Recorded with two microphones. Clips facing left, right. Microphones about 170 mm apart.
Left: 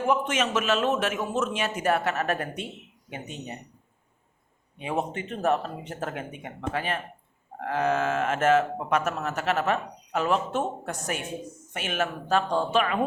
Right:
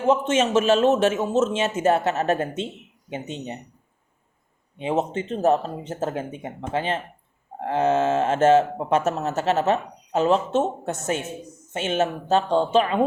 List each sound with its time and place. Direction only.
0.0 s speech: 25° right (ahead or behind)
4.8 s speech: 25° right (ahead or behind)